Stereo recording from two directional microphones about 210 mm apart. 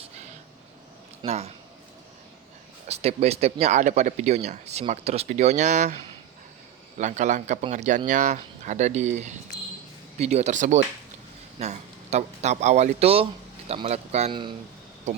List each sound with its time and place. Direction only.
1.2 s speech: 30° right (ahead or behind)
2.8 s speech: 30° right (ahead or behind)
7.0 s a man's voice: 35° right (ahead or behind)